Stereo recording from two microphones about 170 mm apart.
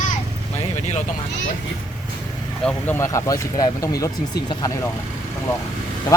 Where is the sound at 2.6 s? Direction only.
15° left (ahead or behind).